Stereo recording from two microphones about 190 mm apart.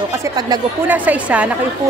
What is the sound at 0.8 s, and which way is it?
Speech, 10° right (ahead or behind).